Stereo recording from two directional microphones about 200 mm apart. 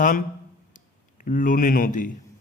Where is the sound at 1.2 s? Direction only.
40° left (ahead or behind).